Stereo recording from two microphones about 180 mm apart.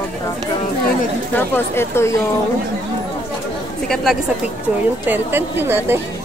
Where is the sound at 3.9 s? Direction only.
Centre (ahead or behind).